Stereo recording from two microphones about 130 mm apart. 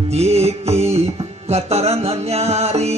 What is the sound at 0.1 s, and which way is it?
Music, 55° right (ahead or behind).